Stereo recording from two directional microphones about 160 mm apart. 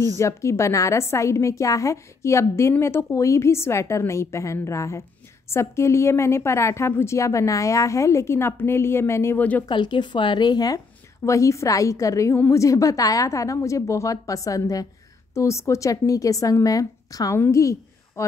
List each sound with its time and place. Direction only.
0.2 s a woman's voice: 15° left (ahead or behind)
9.7 s a woman's voice: 30° left (ahead or behind)